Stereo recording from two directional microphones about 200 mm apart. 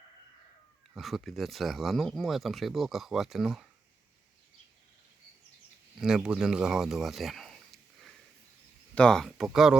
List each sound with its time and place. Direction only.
0.9 s speech: centre (ahead or behind)
6.0 s speech: 5° right (ahead or behind)